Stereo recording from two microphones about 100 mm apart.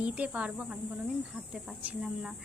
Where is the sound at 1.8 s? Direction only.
15° right (ahead or behind).